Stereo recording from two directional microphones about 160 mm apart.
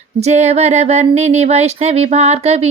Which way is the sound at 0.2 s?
45° right (ahead or behind).